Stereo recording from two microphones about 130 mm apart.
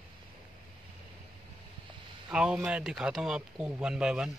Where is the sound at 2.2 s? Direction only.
5° right (ahead or behind).